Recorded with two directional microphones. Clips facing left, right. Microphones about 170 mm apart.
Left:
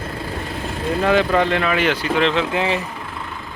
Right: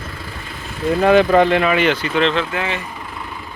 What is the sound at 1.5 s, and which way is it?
Speech, 15° right (ahead or behind).